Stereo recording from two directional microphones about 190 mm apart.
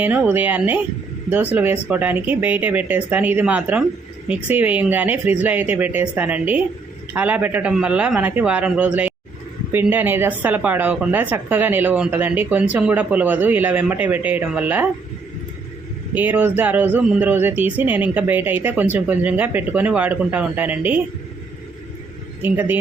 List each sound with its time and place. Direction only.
0.0 s speech: 10° right (ahead or behind)
16.1 s speech: 10° right (ahead or behind)
22.4 s speech: 10° right (ahead or behind)